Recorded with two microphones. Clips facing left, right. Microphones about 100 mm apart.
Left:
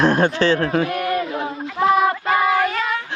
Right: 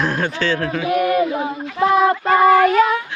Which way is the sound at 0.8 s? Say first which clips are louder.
Right 5 dB; 5° right (ahead or behind).